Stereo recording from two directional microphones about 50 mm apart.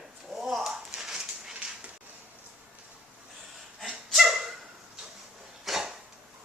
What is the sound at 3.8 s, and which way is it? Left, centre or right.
Dog, centre.